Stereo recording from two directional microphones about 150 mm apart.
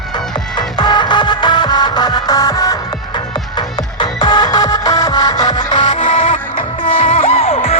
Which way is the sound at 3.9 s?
30° left (ahead or behind).